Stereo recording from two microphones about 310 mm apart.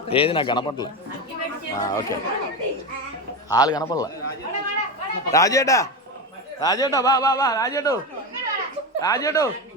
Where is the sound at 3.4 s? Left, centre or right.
Centre.